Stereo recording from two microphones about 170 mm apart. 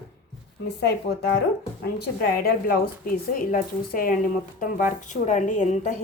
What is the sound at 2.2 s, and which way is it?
A woman's voice, 60° left (ahead or behind).